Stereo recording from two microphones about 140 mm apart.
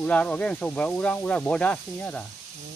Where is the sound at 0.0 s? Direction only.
10° left (ahead or behind).